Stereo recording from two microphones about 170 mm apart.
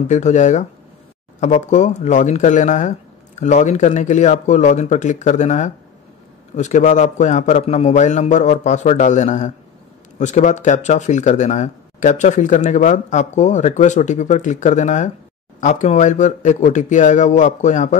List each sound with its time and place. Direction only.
0.1 s speech: 45° left (ahead or behind)